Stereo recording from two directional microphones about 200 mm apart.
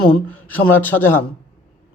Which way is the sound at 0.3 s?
10° left (ahead or behind).